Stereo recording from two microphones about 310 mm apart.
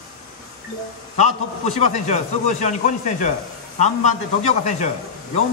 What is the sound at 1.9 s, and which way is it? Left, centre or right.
Speech, left.